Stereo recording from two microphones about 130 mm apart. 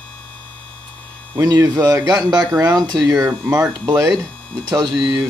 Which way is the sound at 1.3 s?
30° right (ahead or behind).